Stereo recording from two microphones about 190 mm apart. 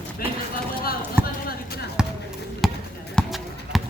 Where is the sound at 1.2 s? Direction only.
10° right (ahead or behind).